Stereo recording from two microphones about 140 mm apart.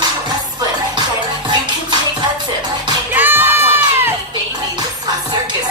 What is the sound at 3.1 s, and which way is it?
Music, 15° right (ahead or behind).